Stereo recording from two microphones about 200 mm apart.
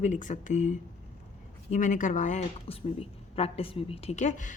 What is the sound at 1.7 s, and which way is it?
A woman's voice, 40° left (ahead or behind).